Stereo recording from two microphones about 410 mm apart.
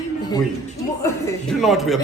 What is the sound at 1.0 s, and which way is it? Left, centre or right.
A man's voice, centre.